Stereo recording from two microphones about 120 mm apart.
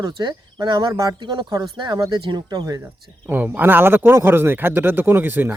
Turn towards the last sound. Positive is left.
turn(degrees=-15)  # may be behind; listen again after turning